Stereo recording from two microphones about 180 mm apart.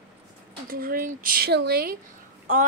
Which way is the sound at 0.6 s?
55° right (ahead or behind).